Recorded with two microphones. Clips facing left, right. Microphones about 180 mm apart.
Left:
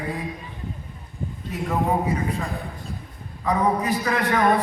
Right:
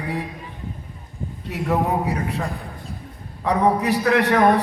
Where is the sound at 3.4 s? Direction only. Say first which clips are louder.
Right 3 dB; 70° right (ahead or behind).